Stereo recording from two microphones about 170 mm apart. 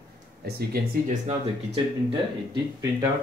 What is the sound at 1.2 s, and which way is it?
Speech, 35° right (ahead or behind).